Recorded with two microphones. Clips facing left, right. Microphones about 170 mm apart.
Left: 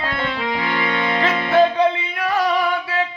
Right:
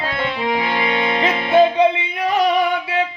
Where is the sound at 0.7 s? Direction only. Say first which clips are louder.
Right 2 dB; 15° right (ahead or behind).